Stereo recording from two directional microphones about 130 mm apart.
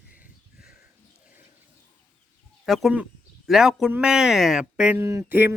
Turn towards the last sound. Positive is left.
turn(degrees=-15)  # may be behind; listen again after turning